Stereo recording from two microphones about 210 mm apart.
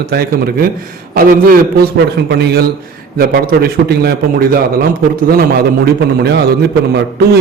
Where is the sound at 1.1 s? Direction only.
45° right (ahead or behind).